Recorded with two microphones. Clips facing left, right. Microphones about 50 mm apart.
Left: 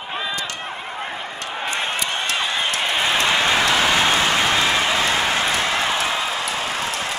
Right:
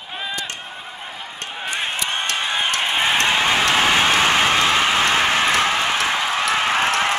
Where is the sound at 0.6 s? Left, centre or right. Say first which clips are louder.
Left 5 dB; left.